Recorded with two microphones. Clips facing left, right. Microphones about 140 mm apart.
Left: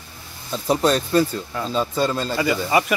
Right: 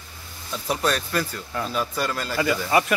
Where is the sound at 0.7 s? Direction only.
30° left (ahead or behind).